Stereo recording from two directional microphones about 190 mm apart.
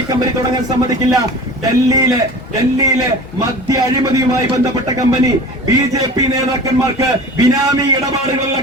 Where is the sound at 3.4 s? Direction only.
20° right (ahead or behind).